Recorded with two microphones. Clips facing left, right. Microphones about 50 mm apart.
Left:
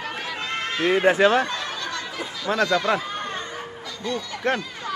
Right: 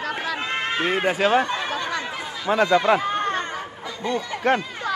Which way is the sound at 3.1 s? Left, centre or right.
Right.